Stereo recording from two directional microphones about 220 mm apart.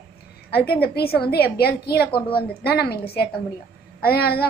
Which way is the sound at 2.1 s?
20° left (ahead or behind).